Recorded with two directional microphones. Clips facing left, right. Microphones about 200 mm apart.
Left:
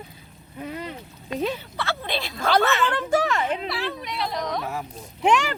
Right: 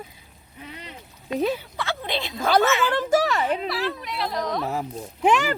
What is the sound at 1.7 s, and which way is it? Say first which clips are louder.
Speech: even; 15° right (ahead or behind).